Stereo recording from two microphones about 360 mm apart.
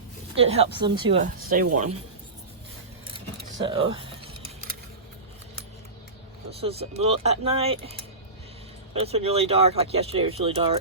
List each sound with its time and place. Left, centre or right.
0.3 s a man's voice: centre
3.6 s speech: centre
6.5 s speech: centre